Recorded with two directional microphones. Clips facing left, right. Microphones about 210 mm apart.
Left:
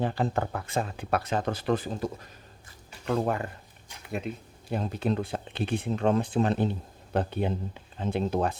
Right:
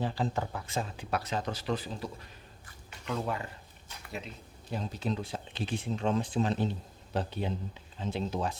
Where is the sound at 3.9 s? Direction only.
15° left (ahead or behind).